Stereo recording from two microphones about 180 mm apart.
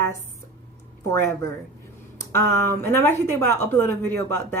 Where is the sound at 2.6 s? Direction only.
15° left (ahead or behind).